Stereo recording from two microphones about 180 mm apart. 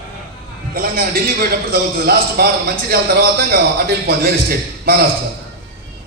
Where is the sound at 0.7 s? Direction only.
55° right (ahead or behind).